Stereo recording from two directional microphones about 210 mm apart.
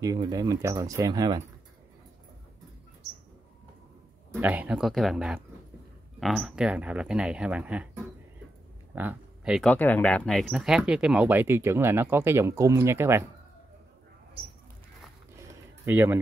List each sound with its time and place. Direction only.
0.0 s speech: 15° right (ahead or behind)
4.3 s speech: 10° right (ahead or behind)
15.8 s speech: 10° right (ahead or behind)